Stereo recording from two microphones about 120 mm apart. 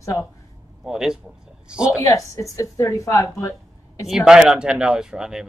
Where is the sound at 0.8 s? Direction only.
5° right (ahead or behind).